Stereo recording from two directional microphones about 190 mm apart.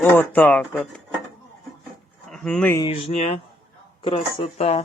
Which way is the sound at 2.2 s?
5° left (ahead or behind).